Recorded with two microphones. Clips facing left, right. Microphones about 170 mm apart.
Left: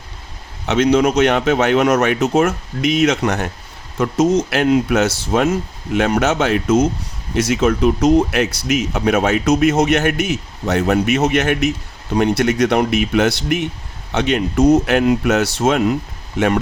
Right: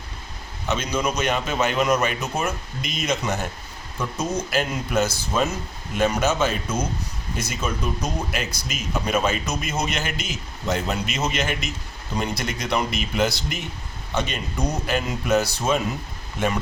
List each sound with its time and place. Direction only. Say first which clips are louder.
0.7 s a man's voice: left 11 dB; 75° left (ahead or behind)